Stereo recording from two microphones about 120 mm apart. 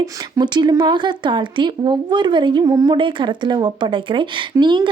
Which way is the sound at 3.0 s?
45° right (ahead or behind).